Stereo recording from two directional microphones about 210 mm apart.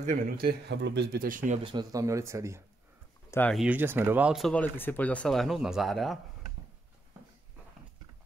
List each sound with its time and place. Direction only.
0.0 s speech: 40° right (ahead or behind)
1.6 s speech: 20° right (ahead or behind)
3.3 s a sound: 10° left (ahead or behind)
3.5 s speech: 5° right (ahead or behind)